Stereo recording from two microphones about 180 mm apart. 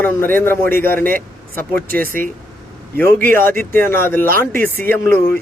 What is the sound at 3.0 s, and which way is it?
Speech, 10° left (ahead or behind).